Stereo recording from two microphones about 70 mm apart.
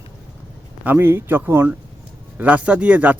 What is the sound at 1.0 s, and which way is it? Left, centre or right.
Speech, right.